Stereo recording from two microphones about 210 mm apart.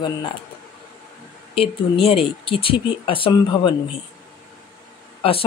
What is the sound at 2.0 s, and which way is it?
Speech, 25° left (ahead or behind).